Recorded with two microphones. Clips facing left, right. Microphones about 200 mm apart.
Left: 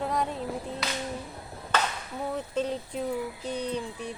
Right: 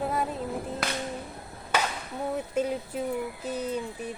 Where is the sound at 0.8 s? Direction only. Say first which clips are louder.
Right 2 dB; 50° right (ahead or behind).